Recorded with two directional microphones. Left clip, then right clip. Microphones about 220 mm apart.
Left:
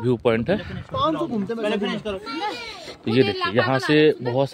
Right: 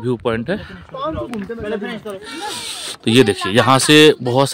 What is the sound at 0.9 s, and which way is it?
Speech, 55° left (ahead or behind).